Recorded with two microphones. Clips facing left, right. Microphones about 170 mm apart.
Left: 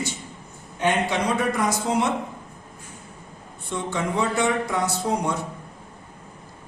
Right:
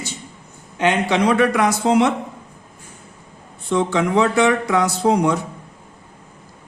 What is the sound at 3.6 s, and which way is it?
Speech, 90° right.